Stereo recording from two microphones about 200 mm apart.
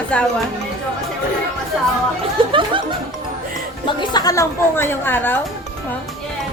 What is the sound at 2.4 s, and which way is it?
Laughter, 25° right (ahead or behind).